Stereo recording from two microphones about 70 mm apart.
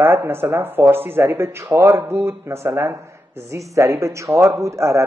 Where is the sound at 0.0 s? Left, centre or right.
Right.